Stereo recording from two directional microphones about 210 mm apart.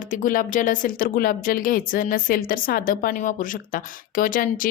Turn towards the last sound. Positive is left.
turn(degrees=40)  # may be behind; listen again after turning